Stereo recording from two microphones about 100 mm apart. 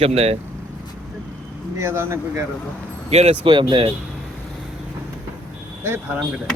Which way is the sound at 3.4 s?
55° right (ahead or behind).